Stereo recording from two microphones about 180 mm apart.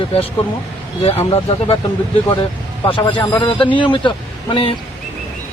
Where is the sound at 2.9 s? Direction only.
25° left (ahead or behind).